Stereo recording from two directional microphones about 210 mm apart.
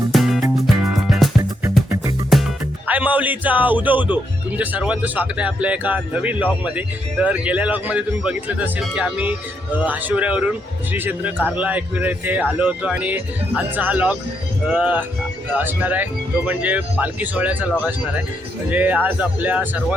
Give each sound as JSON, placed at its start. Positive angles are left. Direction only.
{"t": 0.1, "sound": "music", "side_deg": 0}
{"t": 2.3, "sound": "music", "side_deg": 0}
{"t": 2.8, "sound": "speech", "side_deg": -5}